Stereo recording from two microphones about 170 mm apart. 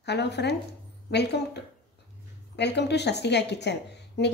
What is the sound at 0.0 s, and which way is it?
A woman's voice, 80° left.